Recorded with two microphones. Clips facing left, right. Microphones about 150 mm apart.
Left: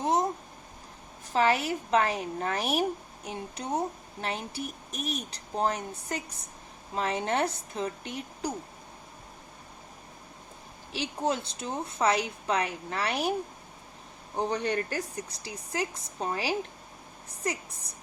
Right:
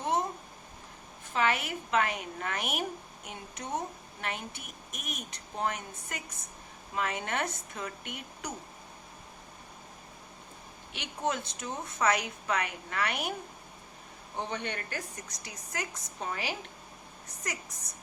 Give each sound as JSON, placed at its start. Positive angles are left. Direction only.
{"t": 0.0, "sound": "a sound", "side_deg": 35}
{"t": 1.3, "sound": "speech", "side_deg": 35}
{"t": 10.9, "sound": "speech", "side_deg": 30}
{"t": 14.3, "sound": "speech", "side_deg": 40}